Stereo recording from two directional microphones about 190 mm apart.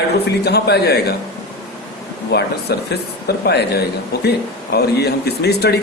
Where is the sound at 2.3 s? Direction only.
60° left (ahead or behind).